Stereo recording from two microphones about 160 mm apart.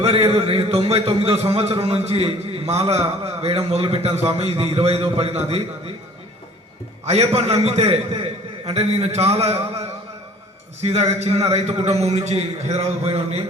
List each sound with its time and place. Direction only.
0.0 s a man's voice: 40° right (ahead or behind)
7.0 s a man's voice: 40° right (ahead or behind)